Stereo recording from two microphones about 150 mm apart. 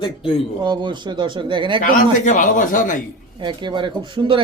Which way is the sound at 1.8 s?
60° left (ahead or behind).